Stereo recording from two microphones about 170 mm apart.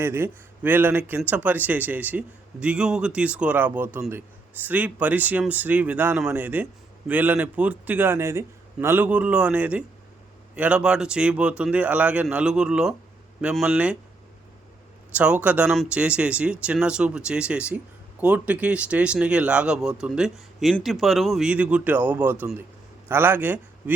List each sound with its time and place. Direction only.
0.0 s speech: 15° right (ahead or behind)
15.1 s speech: 10° right (ahead or behind)